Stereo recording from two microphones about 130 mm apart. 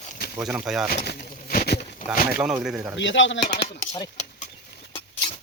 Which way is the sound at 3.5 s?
55° left (ahead or behind).